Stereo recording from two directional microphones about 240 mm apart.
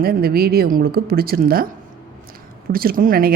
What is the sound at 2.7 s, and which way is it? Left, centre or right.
Speech, right.